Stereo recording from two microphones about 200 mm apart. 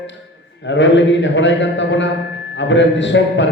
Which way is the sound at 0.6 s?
65° left (ahead or behind).